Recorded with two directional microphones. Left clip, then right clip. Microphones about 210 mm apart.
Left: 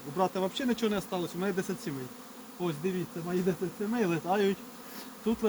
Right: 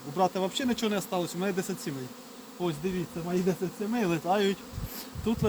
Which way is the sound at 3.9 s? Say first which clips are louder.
Right 2 dB; 15° right (ahead or behind).